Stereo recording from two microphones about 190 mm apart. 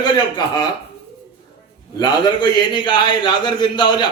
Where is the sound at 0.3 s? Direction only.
20° left (ahead or behind).